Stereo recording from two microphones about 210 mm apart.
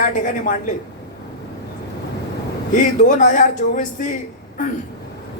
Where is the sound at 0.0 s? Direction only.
40° left (ahead or behind).